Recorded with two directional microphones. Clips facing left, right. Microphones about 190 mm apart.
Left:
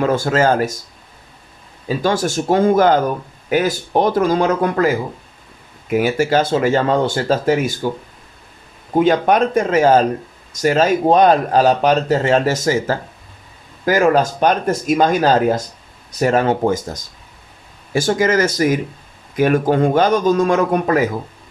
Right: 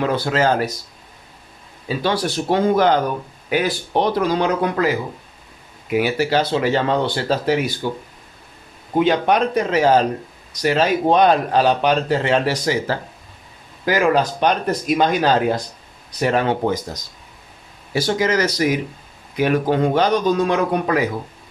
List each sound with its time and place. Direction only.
0.0 s speech: 45° left (ahead or behind)
1.9 s speech: 45° left (ahead or behind)
8.9 s speech: 45° left (ahead or behind)